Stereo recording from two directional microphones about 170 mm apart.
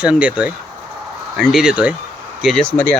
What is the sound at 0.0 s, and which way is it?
Speech, 5° right (ahead or behind).